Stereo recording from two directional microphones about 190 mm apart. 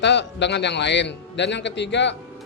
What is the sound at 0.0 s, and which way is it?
A man's voice, 65° left (ahead or behind).